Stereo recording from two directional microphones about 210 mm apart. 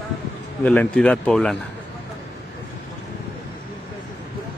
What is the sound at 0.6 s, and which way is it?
Speech, 10° left (ahead or behind).